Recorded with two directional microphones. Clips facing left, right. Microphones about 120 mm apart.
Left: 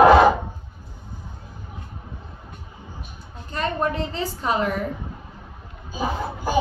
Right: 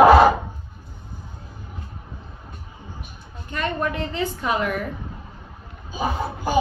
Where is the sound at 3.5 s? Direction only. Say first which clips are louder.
Left 1 dB; 35° left (ahead or behind).